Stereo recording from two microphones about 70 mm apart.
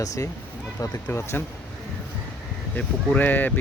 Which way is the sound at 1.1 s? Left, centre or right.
Left.